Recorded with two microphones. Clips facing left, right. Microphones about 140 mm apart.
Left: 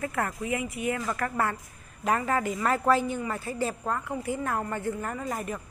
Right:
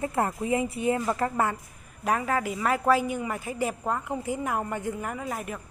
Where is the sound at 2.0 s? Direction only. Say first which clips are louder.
Even; 5° right (ahead or behind).